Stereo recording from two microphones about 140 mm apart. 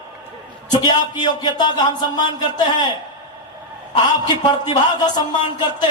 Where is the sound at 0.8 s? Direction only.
30° left (ahead or behind).